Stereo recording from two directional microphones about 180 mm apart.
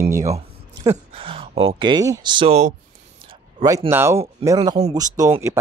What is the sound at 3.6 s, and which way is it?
Speech, 20° right (ahead or behind).